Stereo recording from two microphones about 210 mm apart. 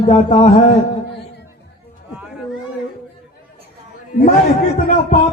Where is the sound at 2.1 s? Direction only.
5° right (ahead or behind).